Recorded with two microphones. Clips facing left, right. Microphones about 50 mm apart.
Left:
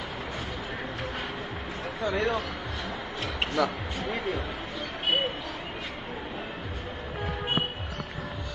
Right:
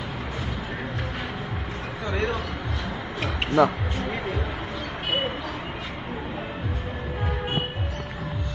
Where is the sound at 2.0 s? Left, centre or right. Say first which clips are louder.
Even; centre.